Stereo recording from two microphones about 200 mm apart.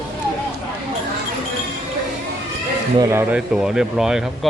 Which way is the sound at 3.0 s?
15° right (ahead or behind).